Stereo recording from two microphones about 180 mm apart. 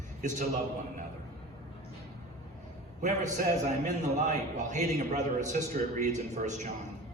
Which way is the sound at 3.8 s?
45° right (ahead or behind).